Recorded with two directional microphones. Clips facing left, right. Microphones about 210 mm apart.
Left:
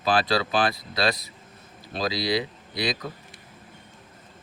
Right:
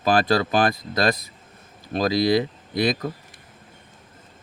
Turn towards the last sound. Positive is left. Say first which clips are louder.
# right 6 dB
turn(degrees=-50)  # may be behind; listen again after turning